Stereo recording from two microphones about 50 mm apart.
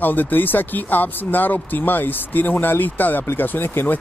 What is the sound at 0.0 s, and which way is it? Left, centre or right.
Speech, left.